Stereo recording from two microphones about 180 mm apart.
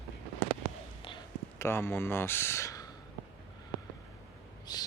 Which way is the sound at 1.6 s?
15° left (ahead or behind).